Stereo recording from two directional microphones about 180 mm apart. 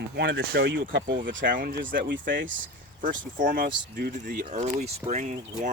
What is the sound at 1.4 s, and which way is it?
Speech, 50° right (ahead or behind).